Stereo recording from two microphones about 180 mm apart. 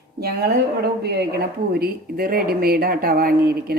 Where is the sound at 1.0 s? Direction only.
65° right (ahead or behind).